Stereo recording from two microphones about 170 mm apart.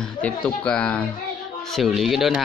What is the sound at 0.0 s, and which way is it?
Speech, 10° left (ahead or behind).